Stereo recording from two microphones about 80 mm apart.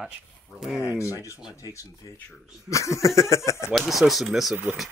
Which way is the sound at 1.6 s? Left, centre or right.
Left.